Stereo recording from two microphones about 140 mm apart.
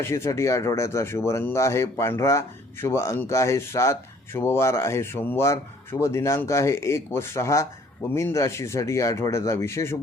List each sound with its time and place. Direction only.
0.0 s speech: 20° left (ahead or behind)